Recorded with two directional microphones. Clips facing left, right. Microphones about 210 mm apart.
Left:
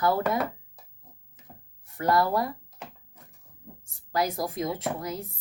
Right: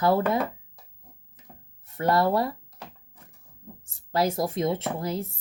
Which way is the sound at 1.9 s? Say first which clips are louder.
Right 2 dB; 25° right (ahead or behind).